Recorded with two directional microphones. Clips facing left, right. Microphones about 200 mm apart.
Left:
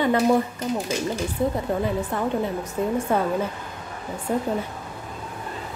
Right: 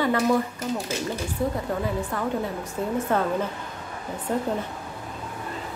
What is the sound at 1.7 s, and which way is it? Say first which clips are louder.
A woman's voice: left 3 dB; 25° left (ahead or behind).